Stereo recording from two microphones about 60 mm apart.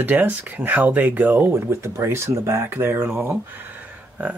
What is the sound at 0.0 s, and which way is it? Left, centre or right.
Speech, right.